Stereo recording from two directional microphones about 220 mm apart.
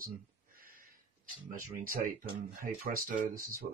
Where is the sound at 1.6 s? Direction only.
35° right (ahead or behind).